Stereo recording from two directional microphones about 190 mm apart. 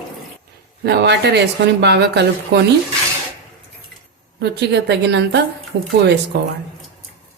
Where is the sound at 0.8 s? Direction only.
60° right (ahead or behind).